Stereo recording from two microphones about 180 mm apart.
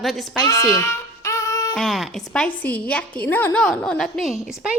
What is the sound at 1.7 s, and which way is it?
A woman's voice, centre (ahead or behind).